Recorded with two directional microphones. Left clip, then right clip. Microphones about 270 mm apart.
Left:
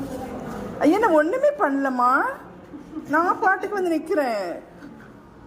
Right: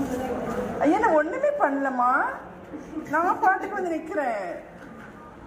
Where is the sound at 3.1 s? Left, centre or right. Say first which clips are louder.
Left 2 dB; left.